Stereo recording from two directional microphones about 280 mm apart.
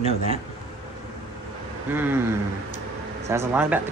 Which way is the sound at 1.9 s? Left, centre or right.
Centre.